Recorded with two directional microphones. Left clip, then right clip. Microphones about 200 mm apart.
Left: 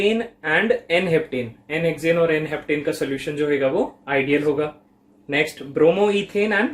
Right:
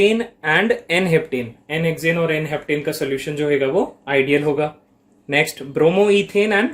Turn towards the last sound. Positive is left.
turn(degrees=-40)  # may be behind; listen again after turning